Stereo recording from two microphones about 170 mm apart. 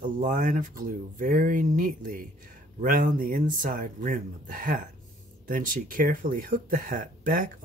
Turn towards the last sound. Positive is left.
turn(degrees=-55)  # may be behind; listen again after turning